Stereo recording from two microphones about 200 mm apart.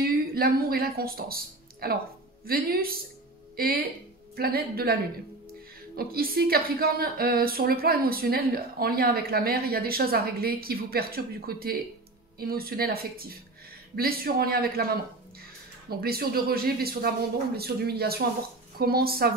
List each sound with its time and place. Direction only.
0.3 s a woman's voice: 50° right (ahead or behind)
5.9 s a woman's voice: 50° right (ahead or behind)
15.9 s a woman's voice: 50° right (ahead or behind)